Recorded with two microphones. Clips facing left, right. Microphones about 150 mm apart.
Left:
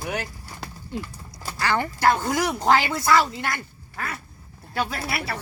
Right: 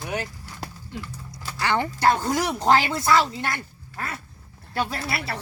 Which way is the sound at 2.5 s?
5° left (ahead or behind).